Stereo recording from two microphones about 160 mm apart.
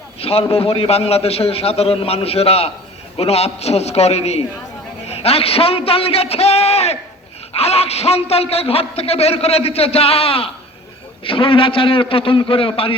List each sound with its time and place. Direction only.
0.2 s a man's voice: 40° left (ahead or behind)